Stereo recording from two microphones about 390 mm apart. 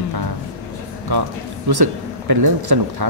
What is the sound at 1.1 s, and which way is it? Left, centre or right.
A man's voice, right.